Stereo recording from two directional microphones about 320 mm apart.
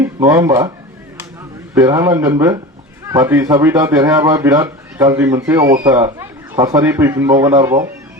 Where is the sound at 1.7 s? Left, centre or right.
Centre.